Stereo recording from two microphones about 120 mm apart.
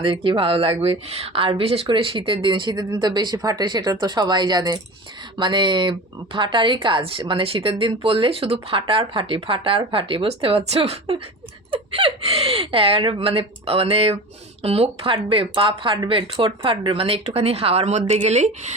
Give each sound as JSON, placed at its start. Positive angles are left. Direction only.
{"t": 0.0, "sound": "speech", "side_deg": -45}